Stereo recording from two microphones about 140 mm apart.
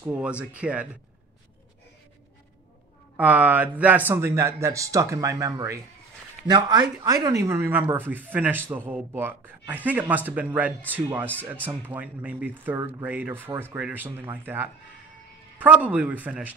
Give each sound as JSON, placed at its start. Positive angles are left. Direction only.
{"t": 0.0, "sound": "speech", "side_deg": -10}
{"t": 3.2, "sound": "speech", "side_deg": -10}